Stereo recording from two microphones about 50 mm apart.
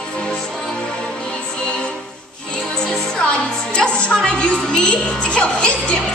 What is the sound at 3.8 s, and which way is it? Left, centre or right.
Music, centre.